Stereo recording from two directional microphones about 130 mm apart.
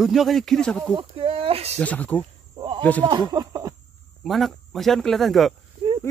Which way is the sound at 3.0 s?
30° right (ahead or behind).